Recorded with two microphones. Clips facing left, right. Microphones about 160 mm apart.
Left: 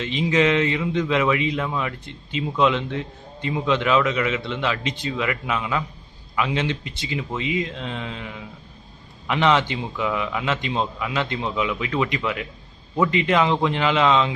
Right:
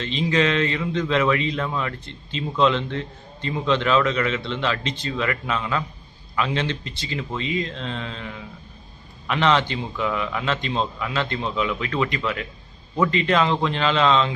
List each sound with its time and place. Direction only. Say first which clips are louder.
0.0 s a man's voice: left 1 dB; 15° left (ahead or behind)